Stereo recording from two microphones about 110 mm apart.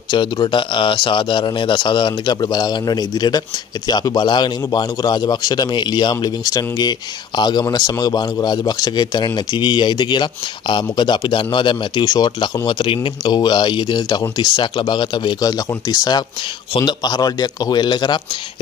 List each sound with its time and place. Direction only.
0.1 s a man's voice: 45° left (ahead or behind)
12.6 s a man's voice: 50° left (ahead or behind)